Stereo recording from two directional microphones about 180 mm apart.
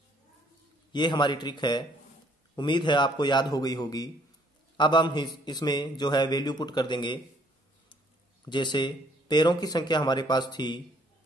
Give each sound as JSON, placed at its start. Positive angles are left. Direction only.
{"t": 0.9, "sound": "a man's voice", "side_deg": 25}
{"t": 8.5, "sound": "a man's voice", "side_deg": 25}